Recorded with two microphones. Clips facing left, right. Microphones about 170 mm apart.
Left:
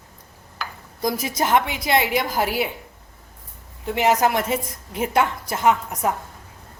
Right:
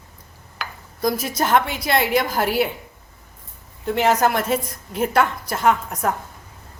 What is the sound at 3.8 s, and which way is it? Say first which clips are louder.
A woman's voice: right 1 dB; 10° left (ahead or behind).